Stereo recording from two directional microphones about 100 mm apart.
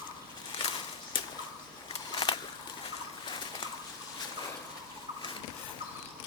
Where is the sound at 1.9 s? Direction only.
55° left (ahead or behind).